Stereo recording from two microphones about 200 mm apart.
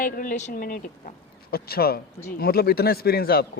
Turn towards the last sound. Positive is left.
turn(degrees=50)  # may be behind; listen again after turning